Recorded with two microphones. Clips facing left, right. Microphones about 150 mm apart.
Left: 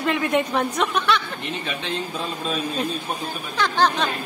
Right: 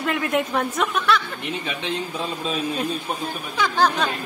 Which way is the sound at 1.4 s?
15° right (ahead or behind).